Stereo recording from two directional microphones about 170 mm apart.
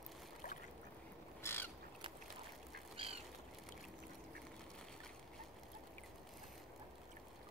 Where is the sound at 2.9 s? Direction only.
35° right (ahead or behind).